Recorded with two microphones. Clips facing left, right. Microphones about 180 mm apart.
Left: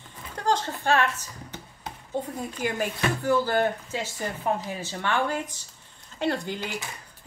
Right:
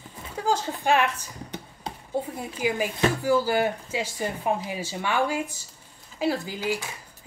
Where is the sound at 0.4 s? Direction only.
10° right (ahead or behind).